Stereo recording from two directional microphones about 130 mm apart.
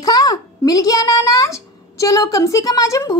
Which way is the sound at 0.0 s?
30° left (ahead or behind).